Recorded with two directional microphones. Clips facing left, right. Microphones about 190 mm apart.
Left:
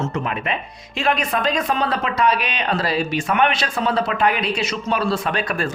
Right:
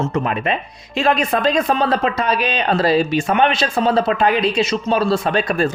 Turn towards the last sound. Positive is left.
turn(degrees=-25)  # may be behind; listen again after turning